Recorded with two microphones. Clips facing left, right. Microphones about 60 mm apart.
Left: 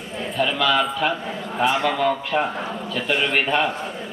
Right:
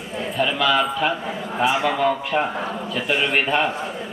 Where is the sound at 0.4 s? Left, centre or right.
Centre.